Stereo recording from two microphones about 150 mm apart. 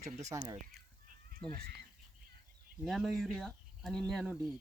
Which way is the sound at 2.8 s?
Centre (ahead or behind).